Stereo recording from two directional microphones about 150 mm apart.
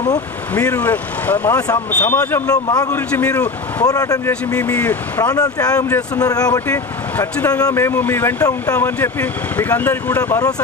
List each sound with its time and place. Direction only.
0.6 s speech: 10° left (ahead or behind)
2.9 s speech: 10° left (ahead or behind)
3.8 s speech: 25° left (ahead or behind)
4.5 s speech: 10° left (ahead or behind)
5.2 s speech: 25° left (ahead or behind)
7.2 s speech: 10° left (ahead or behind)